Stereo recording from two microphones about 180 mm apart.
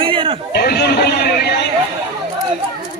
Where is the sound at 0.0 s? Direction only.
30° right (ahead or behind).